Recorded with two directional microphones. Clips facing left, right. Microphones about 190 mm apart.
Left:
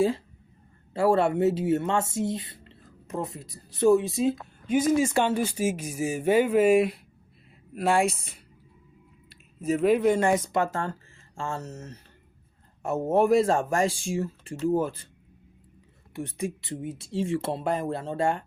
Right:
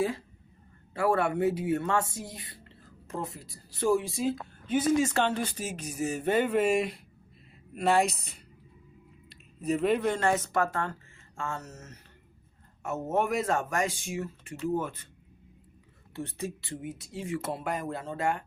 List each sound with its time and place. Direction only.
0.9 s speech: 25° left (ahead or behind)
4.6 s speech: 10° left (ahead or behind)
9.3 s speech: 5° left (ahead or behind)
10.6 s speech: 30° left (ahead or behind)
16.1 s speech: 15° left (ahead or behind)